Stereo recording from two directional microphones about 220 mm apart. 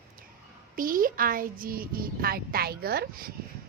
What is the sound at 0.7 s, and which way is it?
Speech, 40° right (ahead or behind).